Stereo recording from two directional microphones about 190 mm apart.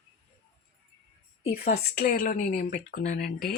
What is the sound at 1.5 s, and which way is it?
Speech, 55° left (ahead or behind).